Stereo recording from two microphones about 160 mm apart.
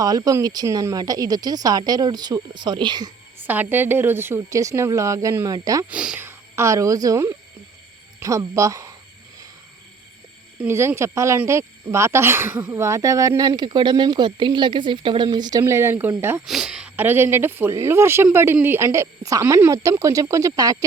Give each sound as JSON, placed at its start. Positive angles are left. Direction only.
{"t": 0.0, "sound": "speech", "side_deg": -25}
{"t": 3.3, "sound": "speech", "side_deg": -10}
{"t": 5.9, "sound": "speech", "side_deg": -5}
{"t": 10.6, "sound": "speech", "side_deg": -15}
{"t": 16.5, "sound": "speech", "side_deg": -5}